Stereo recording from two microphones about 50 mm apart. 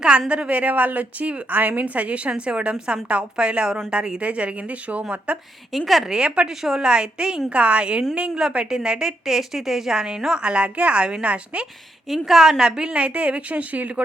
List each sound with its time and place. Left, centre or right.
0.3 s a woman's voice: right
5.7 s a woman's voice: centre; by 11.6 s right
12.0 s a woman's voice: centre; by 14.0 s right